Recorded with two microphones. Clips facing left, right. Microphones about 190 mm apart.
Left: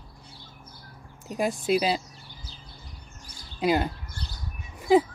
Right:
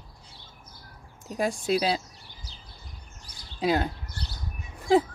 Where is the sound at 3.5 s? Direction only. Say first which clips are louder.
Left 1 dB; 5° left (ahead or behind).